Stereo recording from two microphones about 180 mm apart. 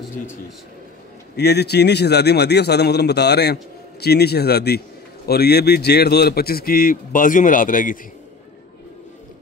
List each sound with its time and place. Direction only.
1.3 s a man's voice: 65° left (ahead or behind); by 8.0 s 50° left (ahead or behind)